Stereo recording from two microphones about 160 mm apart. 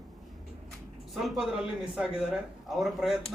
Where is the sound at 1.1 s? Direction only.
Centre (ahead or behind).